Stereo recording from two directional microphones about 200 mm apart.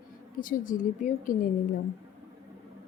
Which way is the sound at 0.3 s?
40° left (ahead or behind).